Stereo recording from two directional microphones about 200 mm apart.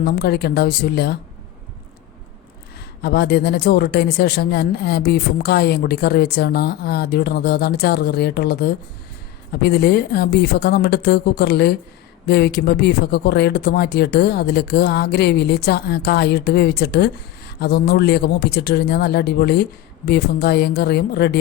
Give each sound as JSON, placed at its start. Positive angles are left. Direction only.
{"t": 0.0, "sound": "speech", "side_deg": 50}
{"t": 3.0, "sound": "speech", "side_deg": 55}